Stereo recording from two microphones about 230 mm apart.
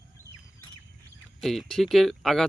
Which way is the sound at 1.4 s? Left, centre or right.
Centre.